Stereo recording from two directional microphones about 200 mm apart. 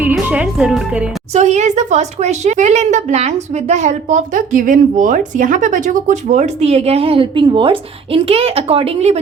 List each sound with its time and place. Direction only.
0.0 s a woman's voice: 10° right (ahead or behind)
1.3 s speech: 35° right (ahead or behind)